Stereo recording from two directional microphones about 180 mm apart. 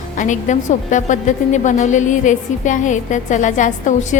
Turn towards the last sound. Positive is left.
turn(degrees=45)  # may be behind; listen again after turning